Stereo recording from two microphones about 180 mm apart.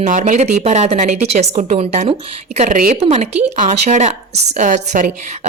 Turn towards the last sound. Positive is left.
turn(degrees=-45)  # may be behind; listen again after turning